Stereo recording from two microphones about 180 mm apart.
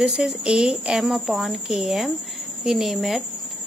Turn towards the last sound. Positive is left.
turn(degrees=0)  # may be behind; listen again after turning